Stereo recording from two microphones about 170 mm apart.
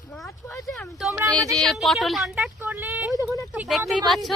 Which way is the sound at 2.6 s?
15° right (ahead or behind).